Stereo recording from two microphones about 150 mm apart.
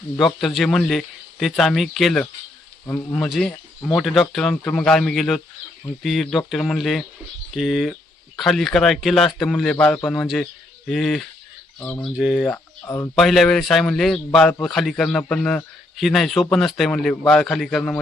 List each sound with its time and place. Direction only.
0.2 s speech: centre (ahead or behind)
12.8 s speech: 20° left (ahead or behind)
13.1 s speech: centre (ahead or behind)